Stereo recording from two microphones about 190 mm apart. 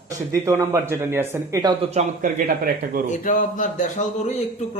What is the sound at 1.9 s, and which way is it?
A man's voice, 45° right (ahead or behind).